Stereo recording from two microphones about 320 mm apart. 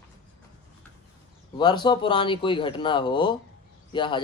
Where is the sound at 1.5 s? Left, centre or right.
Centre.